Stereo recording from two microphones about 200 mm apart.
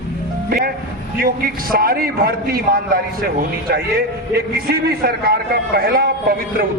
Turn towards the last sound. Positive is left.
turn(degrees=-50)  # may be behind; listen again after turning